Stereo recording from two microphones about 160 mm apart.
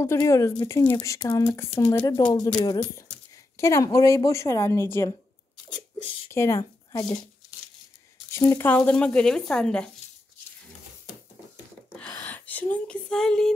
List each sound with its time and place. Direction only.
0.0 s speech: 20° left (ahead or behind)
6.3 s speech: 15° left (ahead or behind)
8.3 s speech: 15° left (ahead or behind)
12.1 s speech: 10° left (ahead or behind)